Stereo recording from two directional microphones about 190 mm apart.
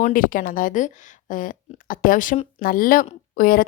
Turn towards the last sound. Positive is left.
turn(degrees=50)  # may be behind; listen again after turning